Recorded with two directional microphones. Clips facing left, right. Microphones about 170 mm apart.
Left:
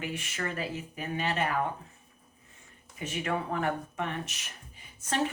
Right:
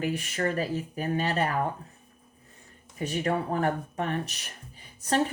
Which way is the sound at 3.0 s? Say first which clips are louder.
Right 4 dB; 35° right (ahead or behind).